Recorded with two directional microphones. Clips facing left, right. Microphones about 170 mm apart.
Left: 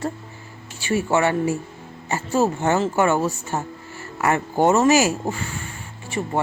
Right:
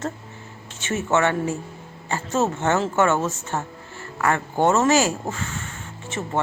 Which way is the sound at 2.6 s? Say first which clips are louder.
Left 1 dB; 5° left (ahead or behind).